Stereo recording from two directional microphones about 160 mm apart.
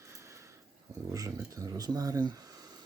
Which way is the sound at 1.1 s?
20° right (ahead or behind).